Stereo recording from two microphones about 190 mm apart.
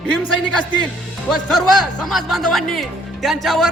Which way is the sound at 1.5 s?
Centre (ahead or behind).